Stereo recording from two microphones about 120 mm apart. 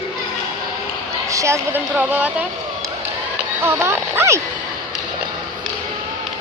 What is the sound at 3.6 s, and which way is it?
Speech, 20° right (ahead or behind).